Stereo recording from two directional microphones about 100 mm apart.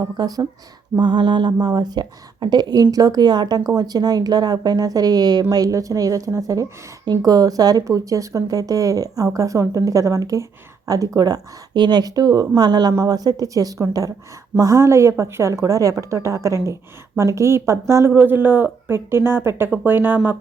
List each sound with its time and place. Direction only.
0.0 s a woman's voice: 40° right (ahead or behind)
0.9 s a woman's voice: 50° right (ahead or behind); by 20.3 s 20° right (ahead or behind)